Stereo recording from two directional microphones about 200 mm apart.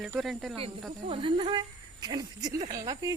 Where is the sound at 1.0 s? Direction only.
25° right (ahead or behind).